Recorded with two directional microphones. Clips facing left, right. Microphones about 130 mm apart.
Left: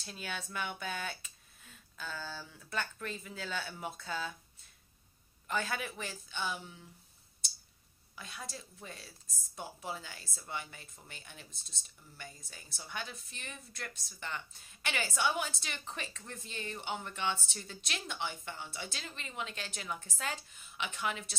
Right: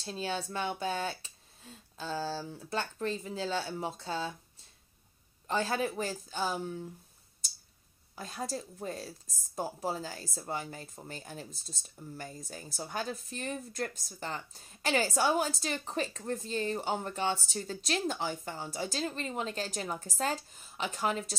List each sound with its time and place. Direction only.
0.0 s a woman's voice: 30° right (ahead or behind)
5.5 s a woman's voice: 35° right (ahead or behind)
8.2 s a woman's voice: 40° right (ahead or behind)